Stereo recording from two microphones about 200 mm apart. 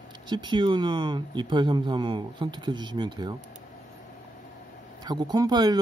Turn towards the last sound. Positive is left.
turn(degrees=-20)  # may be behind; listen again after turning